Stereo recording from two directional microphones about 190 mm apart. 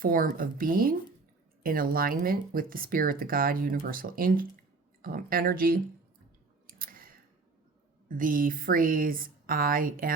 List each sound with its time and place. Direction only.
0.0 s speech: 50° right (ahead or behind)
6.7 s clicking: 50° right (ahead or behind)
8.0 s speech: 45° right (ahead or behind)